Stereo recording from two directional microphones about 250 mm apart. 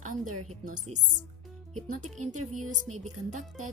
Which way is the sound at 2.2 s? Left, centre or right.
Right.